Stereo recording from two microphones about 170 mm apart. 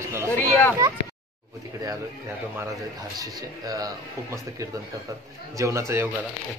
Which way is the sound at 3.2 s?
20° right (ahead or behind).